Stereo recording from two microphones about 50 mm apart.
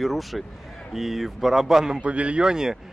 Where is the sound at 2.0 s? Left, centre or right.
Right.